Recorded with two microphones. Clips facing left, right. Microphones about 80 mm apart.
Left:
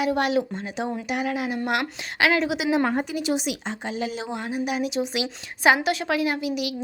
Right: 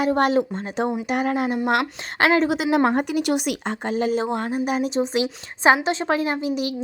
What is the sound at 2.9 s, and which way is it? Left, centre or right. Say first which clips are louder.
A woman's voice: right 4 dB; right.